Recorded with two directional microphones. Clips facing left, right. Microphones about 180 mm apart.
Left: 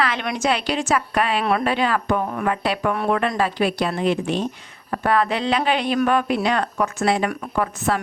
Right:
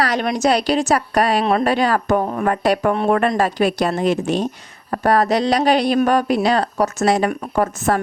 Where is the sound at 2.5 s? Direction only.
45° right (ahead or behind).